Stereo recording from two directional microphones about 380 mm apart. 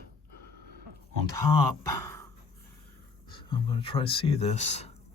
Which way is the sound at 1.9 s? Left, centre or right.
Centre.